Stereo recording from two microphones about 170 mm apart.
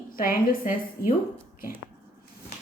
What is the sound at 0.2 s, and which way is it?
Speech, 55° left (ahead or behind).